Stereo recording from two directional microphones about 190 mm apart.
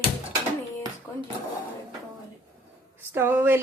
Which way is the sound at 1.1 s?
15° left (ahead or behind).